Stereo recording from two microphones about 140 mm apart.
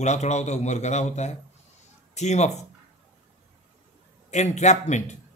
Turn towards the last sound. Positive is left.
turn(degrees=55)  # may be behind; listen again after turning